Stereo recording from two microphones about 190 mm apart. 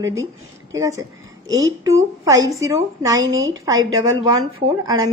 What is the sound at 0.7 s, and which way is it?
A woman's voice, 15° right (ahead or behind).